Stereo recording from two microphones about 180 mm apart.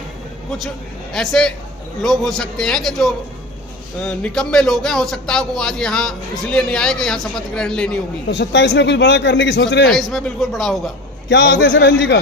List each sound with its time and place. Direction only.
1.1 s speech: centre (ahead or behind)
8.3 s a man's voice: 80° left
9.9 s speech: centre (ahead or behind)
11.3 s a man's voice: 85° left